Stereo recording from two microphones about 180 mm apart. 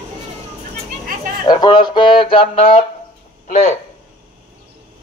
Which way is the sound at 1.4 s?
25° left (ahead or behind).